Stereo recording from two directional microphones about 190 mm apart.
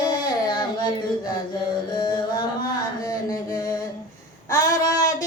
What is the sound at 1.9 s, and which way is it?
Music, 20° left (ahead or behind).